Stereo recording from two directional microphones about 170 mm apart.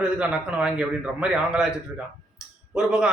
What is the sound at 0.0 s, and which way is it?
A man's voice, 5° right (ahead or behind).